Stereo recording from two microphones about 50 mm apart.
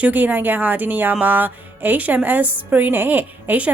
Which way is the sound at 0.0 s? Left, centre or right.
Right.